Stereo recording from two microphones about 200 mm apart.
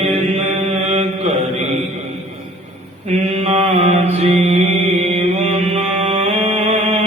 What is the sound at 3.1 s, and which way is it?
Mantra, 30° right (ahead or behind).